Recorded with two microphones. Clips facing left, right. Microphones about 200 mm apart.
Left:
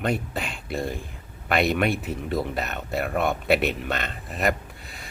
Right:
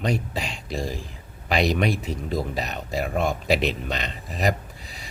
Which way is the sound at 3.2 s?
60° left (ahead or behind).